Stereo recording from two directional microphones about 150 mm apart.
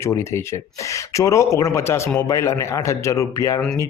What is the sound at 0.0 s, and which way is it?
Speech, 15° left (ahead or behind).